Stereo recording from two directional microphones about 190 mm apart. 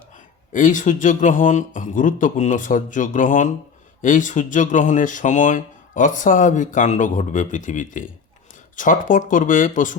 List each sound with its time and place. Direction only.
0.5 s speech: 45° left (ahead or behind)